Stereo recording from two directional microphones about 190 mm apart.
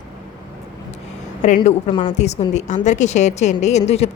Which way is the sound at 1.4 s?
40° left (ahead or behind).